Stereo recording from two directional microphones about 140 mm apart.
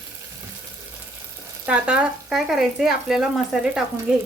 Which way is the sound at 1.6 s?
10° right (ahead or behind).